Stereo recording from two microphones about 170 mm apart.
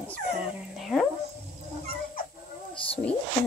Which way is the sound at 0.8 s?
Centre (ahead or behind).